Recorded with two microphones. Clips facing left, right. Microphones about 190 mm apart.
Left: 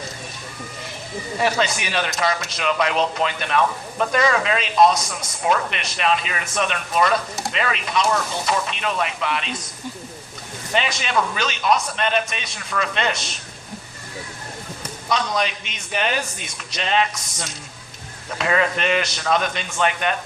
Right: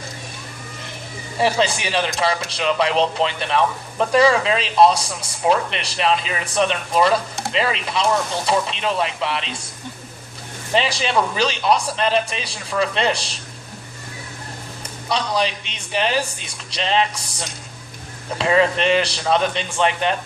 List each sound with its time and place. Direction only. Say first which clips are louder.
1.4 s a man's voice: right 3 dB; 30° right (ahead or behind)
10.8 s a man's voice: right 3 dB; 30° right (ahead or behind)
15.1 s a man's voice: right 1 dB; 30° right (ahead or behind)